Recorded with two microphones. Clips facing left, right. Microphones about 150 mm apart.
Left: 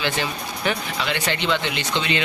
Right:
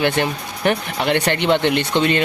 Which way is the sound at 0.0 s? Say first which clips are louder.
Right 6 dB; 55° right (ahead or behind).